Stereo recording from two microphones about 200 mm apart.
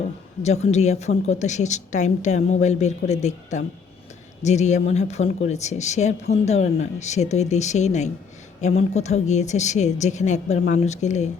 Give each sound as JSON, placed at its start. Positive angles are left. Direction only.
{"t": 0.4, "sound": "speech", "side_deg": 35}